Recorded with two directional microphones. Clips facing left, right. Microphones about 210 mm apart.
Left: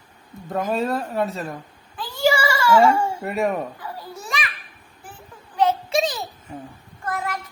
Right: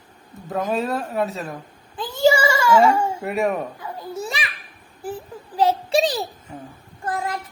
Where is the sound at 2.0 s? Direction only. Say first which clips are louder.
Right 3 dB; 20° right (ahead or behind).